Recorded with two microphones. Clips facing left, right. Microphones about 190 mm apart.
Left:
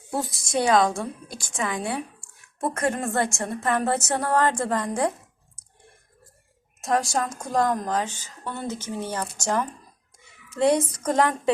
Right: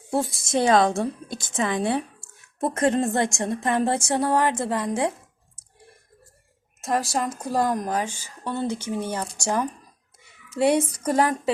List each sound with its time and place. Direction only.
0.1 s a woman's voice: 25° right (ahead or behind); by 4.9 s 10° right (ahead or behind)
6.8 s a woman's voice: centre (ahead or behind)